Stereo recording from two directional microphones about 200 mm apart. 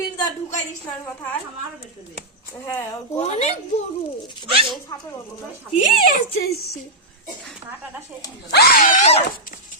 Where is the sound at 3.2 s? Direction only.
35° left (ahead or behind).